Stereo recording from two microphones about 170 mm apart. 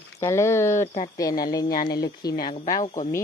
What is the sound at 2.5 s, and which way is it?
Speech, 45° left (ahead or behind).